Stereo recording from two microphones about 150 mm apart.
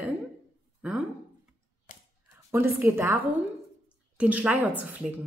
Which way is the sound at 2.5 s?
15° right (ahead or behind).